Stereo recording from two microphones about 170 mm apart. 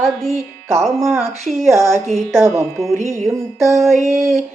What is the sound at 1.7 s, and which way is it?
Speech, 20° left (ahead or behind).